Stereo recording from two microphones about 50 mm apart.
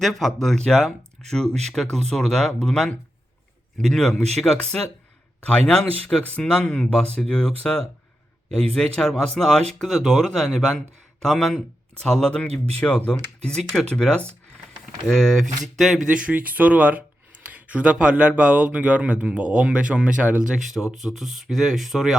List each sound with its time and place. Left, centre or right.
0.0 s speech: centre; by 7.8 s left
9.0 s speech: centre
9.8 s a man's voice: centre
12.4 s a man's voice: left; by 16.0 s centre
16.0 s speech: right
17.5 s a sound: right
18.1 s speech: right
20.6 s a man's voice: centre